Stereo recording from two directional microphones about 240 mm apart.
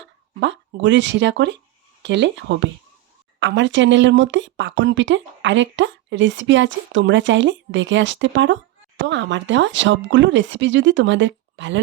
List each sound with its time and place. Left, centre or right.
0.3 s speech: right